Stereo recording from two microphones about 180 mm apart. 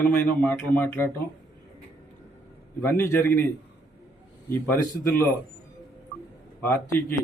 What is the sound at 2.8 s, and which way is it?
Speech, 10° left (ahead or behind).